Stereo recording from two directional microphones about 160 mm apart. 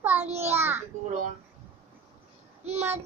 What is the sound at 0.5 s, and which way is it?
Speech, 15° right (ahead or behind).